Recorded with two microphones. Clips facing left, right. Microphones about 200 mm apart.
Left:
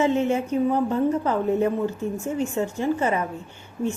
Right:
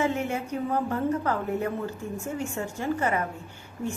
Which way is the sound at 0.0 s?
25° left (ahead or behind).